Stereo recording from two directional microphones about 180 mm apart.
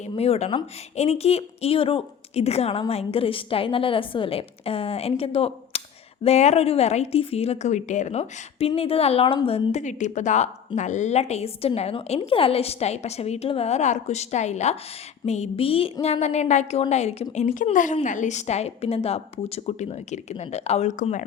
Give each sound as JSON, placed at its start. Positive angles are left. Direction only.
{"t": 0.0, "sound": "speech", "side_deg": 35}